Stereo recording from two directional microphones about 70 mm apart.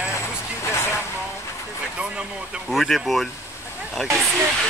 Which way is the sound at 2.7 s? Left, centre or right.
Centre.